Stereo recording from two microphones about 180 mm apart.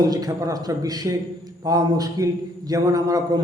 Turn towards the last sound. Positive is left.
turn(degrees=-20)  # may be behind; listen again after turning